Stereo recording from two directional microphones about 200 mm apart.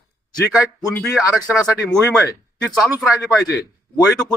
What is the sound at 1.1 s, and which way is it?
Speech, 5° right (ahead or behind).